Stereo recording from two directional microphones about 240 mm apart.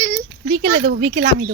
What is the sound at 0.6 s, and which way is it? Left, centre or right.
Speech, right.